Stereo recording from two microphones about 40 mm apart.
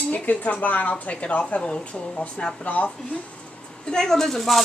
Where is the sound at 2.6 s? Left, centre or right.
Left.